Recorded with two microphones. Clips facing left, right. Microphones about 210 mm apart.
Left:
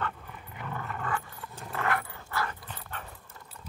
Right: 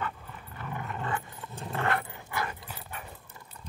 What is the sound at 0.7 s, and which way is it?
Roar, 20° right (ahead or behind).